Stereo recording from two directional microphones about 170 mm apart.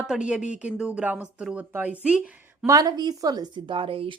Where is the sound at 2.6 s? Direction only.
20° right (ahead or behind).